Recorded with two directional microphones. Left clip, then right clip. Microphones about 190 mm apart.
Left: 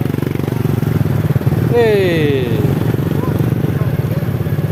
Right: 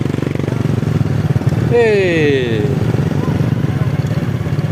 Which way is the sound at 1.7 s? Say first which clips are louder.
Right 1 dB; 10° right (ahead or behind).